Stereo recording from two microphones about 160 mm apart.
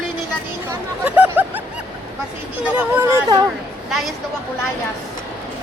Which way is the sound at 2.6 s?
15° right (ahead or behind).